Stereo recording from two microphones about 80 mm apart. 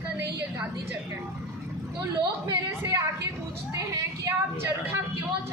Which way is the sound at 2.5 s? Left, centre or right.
Right.